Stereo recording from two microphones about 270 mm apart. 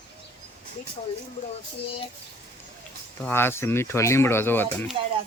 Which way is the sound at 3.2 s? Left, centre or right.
Centre.